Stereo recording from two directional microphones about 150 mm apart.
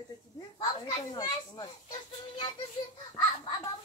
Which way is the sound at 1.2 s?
30° left (ahead or behind).